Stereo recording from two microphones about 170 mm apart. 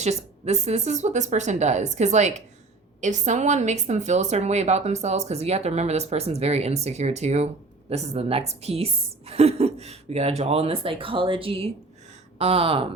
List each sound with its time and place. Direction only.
0.0 s a woman's voice: 40° right (ahead or behind)